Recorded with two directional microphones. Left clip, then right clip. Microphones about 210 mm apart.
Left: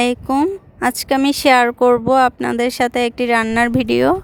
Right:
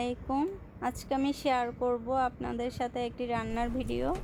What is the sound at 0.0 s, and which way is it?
Speech, 50° left (ahead or behind).